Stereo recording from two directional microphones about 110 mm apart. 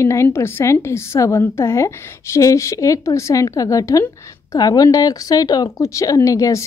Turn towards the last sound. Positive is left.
turn(degrees=30)  # may be behind; listen again after turning